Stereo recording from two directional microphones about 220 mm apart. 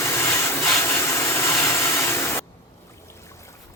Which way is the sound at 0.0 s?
10° left (ahead or behind).